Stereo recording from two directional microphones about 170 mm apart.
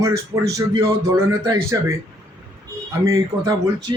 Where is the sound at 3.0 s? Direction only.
20° right (ahead or behind).